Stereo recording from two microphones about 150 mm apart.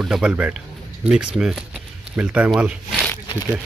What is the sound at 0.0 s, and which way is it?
Speech, 5° right (ahead or behind).